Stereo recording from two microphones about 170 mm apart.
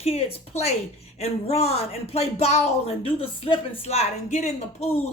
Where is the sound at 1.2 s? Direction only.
35° left (ahead or behind).